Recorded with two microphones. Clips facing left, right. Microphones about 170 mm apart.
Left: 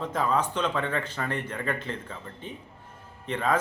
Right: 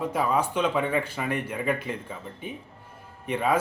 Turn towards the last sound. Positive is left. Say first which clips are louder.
# right 2 dB
turn(degrees=-10)  # may be behind; listen again after turning